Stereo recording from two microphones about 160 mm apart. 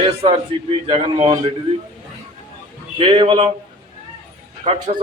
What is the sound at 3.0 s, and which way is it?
Speech, 30° right (ahead or behind).